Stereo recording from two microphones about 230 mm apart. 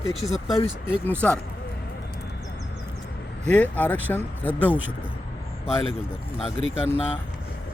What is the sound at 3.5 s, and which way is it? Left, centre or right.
Speech, centre.